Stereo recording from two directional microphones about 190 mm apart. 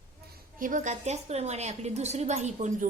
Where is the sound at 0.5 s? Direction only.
45° right (ahead or behind).